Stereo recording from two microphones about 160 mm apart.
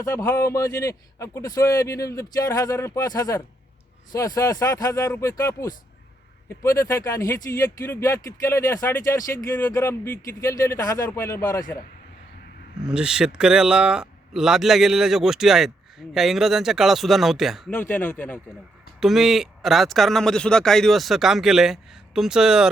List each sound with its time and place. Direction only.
0.0 s speech: 15° left (ahead or behind)
12.8 s speech: 5° right (ahead or behind)
17.7 s speech: 10° left (ahead or behind)
18.9 s speech: centre (ahead or behind)